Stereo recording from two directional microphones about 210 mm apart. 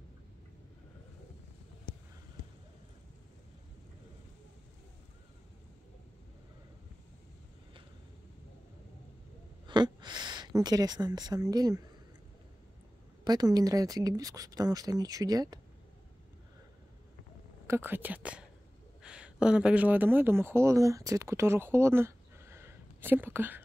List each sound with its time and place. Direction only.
9.7 s a woman's voice: 20° right (ahead or behind)
13.2 s speech: 20° right (ahead or behind)
17.6 s speech: 10° right (ahead or behind)